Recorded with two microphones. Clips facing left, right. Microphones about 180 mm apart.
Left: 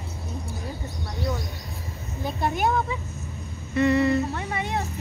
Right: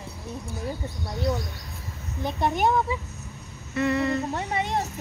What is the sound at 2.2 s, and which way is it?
Speech, 5° left (ahead or behind).